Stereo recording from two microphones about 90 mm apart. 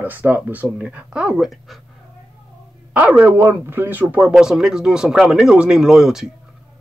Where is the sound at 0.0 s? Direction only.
20° right (ahead or behind); by 1.8 s 5° right (ahead or behind).